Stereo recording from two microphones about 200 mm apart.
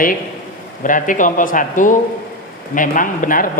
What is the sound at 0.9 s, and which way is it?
A man's voice, 40° left (ahead or behind).